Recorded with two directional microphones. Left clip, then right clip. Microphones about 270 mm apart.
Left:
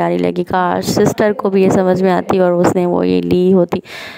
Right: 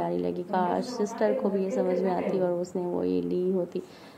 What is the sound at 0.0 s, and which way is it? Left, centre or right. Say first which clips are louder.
Speech: left 14 dB; left.